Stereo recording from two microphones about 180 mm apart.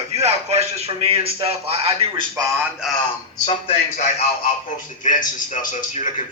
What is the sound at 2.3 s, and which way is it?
Speech, 20° right (ahead or behind).